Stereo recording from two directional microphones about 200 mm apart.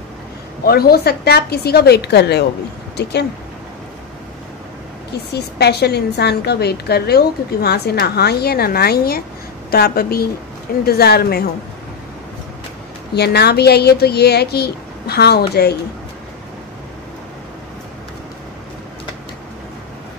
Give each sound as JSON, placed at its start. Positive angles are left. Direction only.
{"t": 0.7, "sound": "a woman's voice", "side_deg": 50}
{"t": 5.3, "sound": "a woman's voice", "side_deg": 55}
{"t": 13.1, "sound": "a woman's voice", "side_deg": 55}